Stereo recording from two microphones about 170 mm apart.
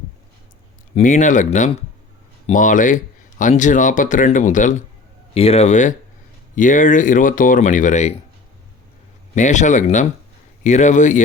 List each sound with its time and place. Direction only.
0.9 s speech: 45° left (ahead or behind)
5.3 s speech: 35° left (ahead or behind)
9.3 s speech: 45° left (ahead or behind)